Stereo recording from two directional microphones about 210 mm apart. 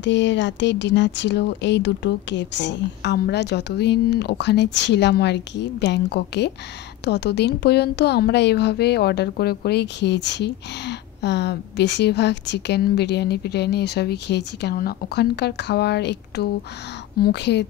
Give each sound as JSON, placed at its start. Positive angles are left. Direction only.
{"t": 0.0, "sound": "speech", "side_deg": 60}